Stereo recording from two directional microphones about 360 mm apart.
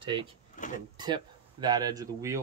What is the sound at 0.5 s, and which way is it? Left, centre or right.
Speech, left.